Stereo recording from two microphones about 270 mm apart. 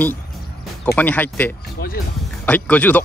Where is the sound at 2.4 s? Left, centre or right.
Centre.